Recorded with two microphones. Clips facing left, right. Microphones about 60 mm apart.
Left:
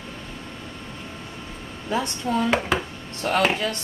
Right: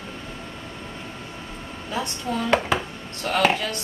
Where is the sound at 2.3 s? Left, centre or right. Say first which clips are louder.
Even; centre.